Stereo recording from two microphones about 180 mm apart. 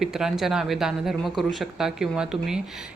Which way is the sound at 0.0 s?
5° right (ahead or behind).